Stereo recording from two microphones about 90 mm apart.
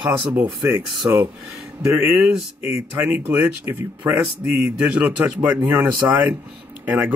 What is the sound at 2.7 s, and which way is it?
A man's voice, 25° right (ahead or behind).